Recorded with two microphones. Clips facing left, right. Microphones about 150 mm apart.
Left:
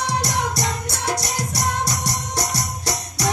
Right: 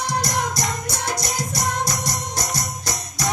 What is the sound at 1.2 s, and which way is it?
Music, 65° left (ahead or behind).